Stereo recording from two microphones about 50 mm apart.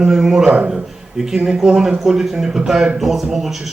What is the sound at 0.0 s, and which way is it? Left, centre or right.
A man's voice, centre.